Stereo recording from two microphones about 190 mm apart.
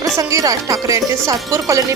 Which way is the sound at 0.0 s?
15° right (ahead or behind).